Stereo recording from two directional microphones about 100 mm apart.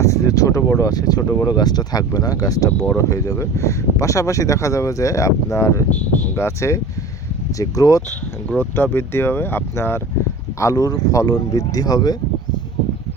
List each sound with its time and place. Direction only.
0.0 s speech: 30° left (ahead or behind)
2.7 s speech: 15° left (ahead or behind)
3.0 s speech: 35° left (ahead or behind)
8.4 s speech: 20° left (ahead or behind)
10.6 s speech: 35° left (ahead or behind)